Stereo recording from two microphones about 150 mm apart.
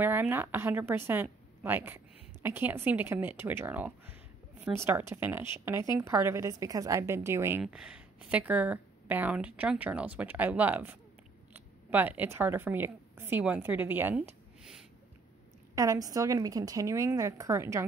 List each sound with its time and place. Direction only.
0.0 s speech: 15° right (ahead or behind)
7.6 s speech: 5° right (ahead or behind)
14.6 s a sound: 5° right (ahead or behind)
15.7 s a woman's voice: 20° right (ahead or behind)